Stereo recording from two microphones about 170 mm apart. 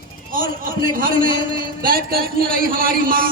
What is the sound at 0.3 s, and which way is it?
A man's voice, 55° right (ahead or behind).